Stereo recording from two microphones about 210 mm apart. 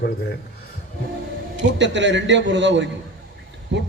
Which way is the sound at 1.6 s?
60° right (ahead or behind).